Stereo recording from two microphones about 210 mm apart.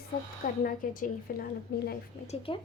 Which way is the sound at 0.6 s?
40° left (ahead or behind).